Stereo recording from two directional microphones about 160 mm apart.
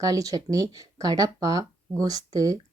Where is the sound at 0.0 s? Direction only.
20° right (ahead or behind).